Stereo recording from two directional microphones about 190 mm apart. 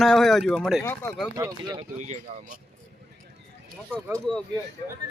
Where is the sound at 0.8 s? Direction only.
15° left (ahead or behind).